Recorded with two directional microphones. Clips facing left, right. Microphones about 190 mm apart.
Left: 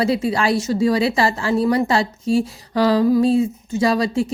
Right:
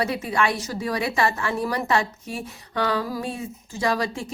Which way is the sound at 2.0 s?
85° left.